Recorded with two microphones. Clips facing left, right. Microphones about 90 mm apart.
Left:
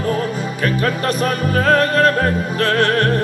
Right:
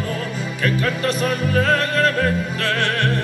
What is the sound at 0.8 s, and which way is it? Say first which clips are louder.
Music: left 3 dB; 45° left (ahead or behind).